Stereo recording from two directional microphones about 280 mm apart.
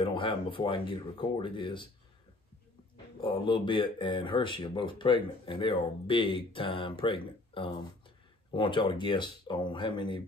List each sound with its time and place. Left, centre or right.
0.0 s speech: centre
3.2 s speech: centre